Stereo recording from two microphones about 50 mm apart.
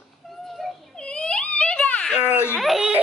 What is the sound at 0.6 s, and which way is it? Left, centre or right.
Baby cry, centre.